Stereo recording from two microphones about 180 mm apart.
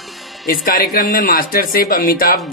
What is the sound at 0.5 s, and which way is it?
Speech, 55° left (ahead or behind).